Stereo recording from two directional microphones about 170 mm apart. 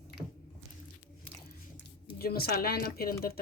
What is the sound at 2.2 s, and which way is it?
Speech, 65° left (ahead or behind).